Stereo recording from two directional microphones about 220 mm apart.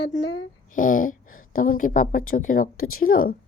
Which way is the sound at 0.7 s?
40° left (ahead or behind).